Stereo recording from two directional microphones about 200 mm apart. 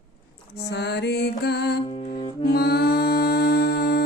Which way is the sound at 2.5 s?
50° left (ahead or behind).